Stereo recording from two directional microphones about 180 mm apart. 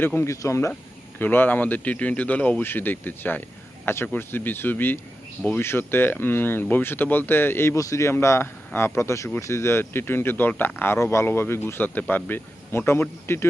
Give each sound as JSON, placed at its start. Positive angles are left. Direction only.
{"t": 0.0, "sound": "speech", "side_deg": 10}